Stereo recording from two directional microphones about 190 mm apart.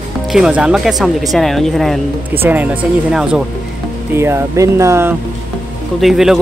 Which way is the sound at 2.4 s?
10° right (ahead or behind).